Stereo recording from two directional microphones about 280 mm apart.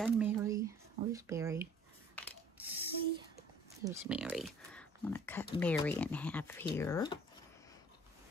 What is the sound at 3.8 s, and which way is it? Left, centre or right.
Speech, centre.